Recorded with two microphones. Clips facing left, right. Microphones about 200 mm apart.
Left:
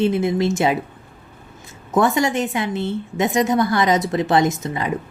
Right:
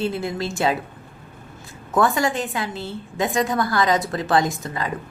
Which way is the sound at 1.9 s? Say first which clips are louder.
Left 2 dB; 20° left (ahead or behind).